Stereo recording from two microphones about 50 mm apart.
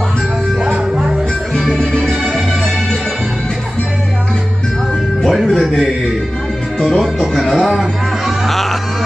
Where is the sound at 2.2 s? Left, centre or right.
Centre.